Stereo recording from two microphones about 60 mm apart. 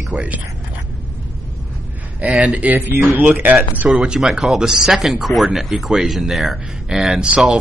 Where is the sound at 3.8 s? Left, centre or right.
Centre.